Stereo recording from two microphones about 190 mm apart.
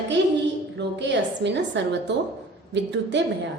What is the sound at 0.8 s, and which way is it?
A woman's voice, 70° right (ahead or behind).